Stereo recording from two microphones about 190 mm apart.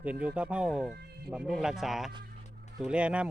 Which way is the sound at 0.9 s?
60° right (ahead or behind).